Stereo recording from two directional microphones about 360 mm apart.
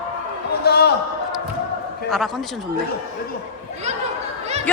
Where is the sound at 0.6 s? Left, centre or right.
Left.